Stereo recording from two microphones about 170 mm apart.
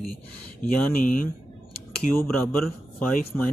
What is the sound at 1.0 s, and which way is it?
Speech, 55° left (ahead or behind).